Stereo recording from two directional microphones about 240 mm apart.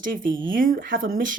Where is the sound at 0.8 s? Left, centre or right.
Right.